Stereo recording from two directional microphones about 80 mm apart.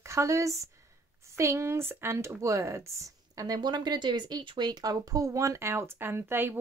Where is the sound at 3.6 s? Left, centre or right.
Right.